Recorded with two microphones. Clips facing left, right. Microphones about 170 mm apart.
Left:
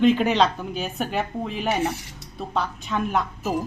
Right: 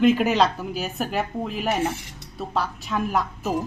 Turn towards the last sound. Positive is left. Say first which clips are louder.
# even
turn(degrees=0)  # may be behind; listen again after turning